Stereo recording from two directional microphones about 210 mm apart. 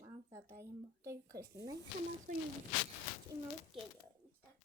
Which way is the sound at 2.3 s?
40° right (ahead or behind).